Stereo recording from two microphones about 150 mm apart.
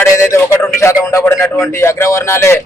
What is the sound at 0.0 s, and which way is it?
A man's voice, 20° left (ahead or behind).